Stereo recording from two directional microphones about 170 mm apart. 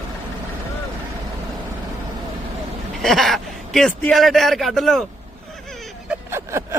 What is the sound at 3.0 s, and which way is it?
Speech, centre (ahead or behind).